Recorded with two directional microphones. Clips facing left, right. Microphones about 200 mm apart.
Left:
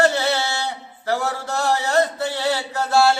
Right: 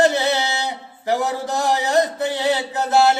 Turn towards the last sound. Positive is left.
turn(degrees=-20)  # may be behind; listen again after turning